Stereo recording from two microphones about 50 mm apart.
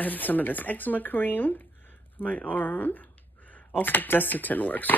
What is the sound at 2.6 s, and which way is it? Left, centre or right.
Speech, left.